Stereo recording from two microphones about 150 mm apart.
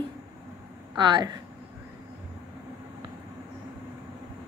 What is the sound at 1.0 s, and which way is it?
Speech, 30° right (ahead or behind).